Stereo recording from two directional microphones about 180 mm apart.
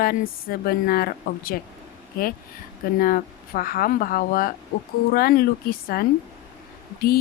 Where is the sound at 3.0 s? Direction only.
50° left (ahead or behind).